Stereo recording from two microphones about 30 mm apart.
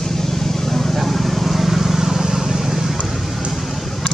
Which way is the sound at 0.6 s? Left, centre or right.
Centre.